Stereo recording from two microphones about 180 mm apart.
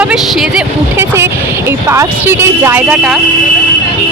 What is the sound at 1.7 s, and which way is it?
Speech, 15° right (ahead or behind).